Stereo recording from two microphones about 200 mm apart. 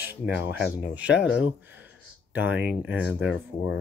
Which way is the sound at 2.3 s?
5° right (ahead or behind).